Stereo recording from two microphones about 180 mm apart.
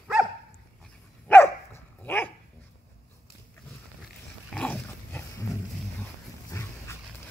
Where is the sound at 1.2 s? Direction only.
10° left (ahead or behind).